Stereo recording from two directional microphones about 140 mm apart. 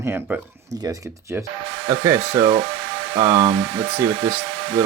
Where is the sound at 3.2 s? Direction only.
35° right (ahead or behind).